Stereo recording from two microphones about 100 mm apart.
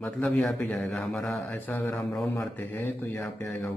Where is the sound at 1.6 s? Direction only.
15° left (ahead or behind).